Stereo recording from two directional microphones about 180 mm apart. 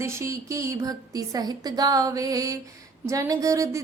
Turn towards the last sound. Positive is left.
turn(degrees=-15)  # may be behind; listen again after turning